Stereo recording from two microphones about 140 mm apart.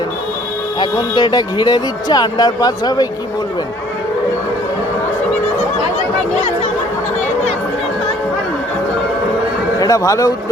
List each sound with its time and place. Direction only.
0.8 s speech: 30° left (ahead or behind)
9.8 s speech: 25° left (ahead or behind)